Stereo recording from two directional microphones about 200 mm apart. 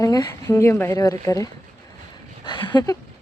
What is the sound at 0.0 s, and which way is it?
Speech, 15° left (ahead or behind).